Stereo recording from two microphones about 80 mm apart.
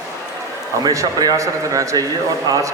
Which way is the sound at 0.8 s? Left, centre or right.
Right.